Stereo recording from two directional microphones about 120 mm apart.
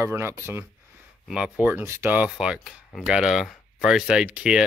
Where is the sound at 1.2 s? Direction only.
5° right (ahead or behind).